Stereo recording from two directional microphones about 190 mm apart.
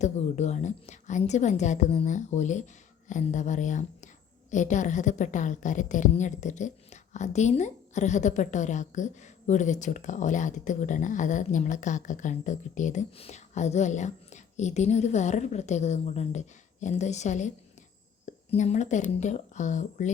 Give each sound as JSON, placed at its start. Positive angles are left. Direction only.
{"t": 0.0, "sound": "a woman's voice", "side_deg": 35}